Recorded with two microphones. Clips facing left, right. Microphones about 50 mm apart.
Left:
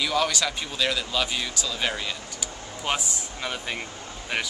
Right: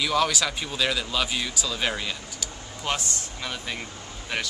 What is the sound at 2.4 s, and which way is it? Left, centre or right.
Speech, centre.